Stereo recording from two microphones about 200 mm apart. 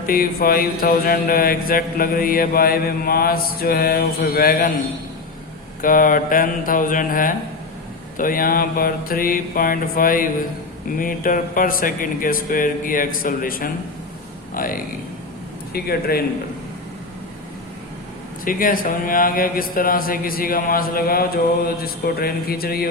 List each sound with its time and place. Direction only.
0.0 s mantra: 45° left (ahead or behind)
5.8 s mantra: 45° left (ahead or behind)
18.4 s mantra: 45° left (ahead or behind)